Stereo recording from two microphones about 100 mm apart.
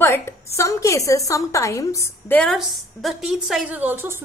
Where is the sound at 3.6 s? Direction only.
15° right (ahead or behind).